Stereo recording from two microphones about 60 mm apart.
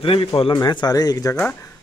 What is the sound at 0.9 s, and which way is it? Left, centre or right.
Speech, left.